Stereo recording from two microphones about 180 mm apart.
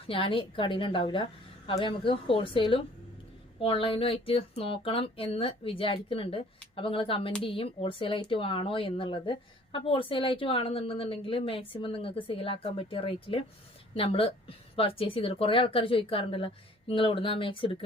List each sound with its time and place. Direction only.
0.1 s speech: 30° left (ahead or behind)